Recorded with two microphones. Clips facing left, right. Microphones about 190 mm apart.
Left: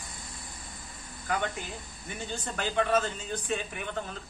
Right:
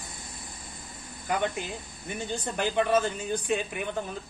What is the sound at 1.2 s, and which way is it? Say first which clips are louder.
Speech: right 3 dB; 20° right (ahead or behind).